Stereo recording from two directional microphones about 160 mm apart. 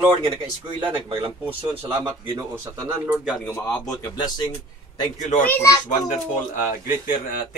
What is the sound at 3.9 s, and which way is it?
Speech, 25° left (ahead or behind).